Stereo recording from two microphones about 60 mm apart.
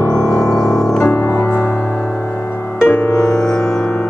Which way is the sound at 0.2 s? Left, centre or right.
Centre.